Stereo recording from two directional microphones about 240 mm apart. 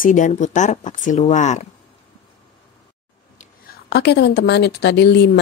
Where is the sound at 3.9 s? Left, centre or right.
Left.